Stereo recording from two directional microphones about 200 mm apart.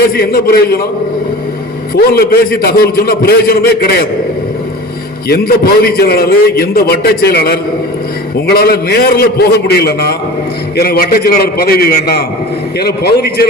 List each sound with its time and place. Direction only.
0.1 s a man's voice: 50° left (ahead or behind)
2.0 s a man's voice: 50° left (ahead or behind)
5.3 s a man's voice: 50° left (ahead or behind)